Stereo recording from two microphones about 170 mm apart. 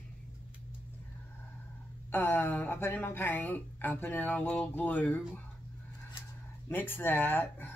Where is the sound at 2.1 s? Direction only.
10° left (ahead or behind).